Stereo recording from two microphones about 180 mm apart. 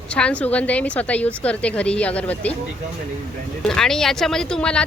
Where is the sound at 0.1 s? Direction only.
5° left (ahead or behind).